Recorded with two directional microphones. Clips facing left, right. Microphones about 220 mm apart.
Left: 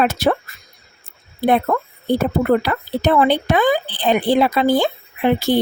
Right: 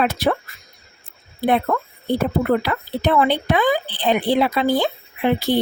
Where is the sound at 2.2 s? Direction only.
45° left (ahead or behind).